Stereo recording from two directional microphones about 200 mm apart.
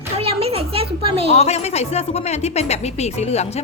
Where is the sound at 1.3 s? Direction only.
30° left (ahead or behind).